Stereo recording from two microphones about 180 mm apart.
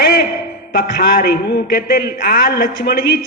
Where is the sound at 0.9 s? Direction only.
55° left (ahead or behind).